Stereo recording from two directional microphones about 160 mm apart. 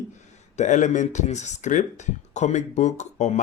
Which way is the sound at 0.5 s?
50° left (ahead or behind).